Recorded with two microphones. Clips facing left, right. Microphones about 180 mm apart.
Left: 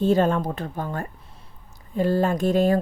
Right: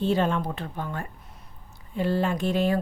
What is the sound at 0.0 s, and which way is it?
A woman's voice, 45° left (ahead or behind).